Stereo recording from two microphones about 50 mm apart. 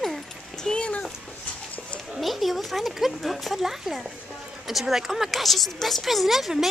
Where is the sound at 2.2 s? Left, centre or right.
Centre.